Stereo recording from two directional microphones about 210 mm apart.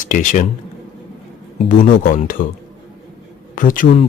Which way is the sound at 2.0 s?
40° left (ahead or behind).